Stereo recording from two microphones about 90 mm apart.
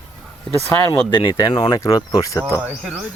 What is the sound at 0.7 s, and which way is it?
Speech, 40° left (ahead or behind).